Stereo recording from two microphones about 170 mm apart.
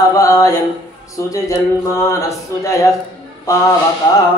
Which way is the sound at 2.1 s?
20° left (ahead or behind).